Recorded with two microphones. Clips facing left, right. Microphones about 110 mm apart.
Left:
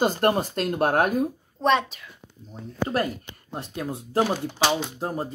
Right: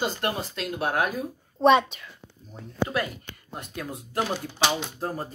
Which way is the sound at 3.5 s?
30° left (ahead or behind).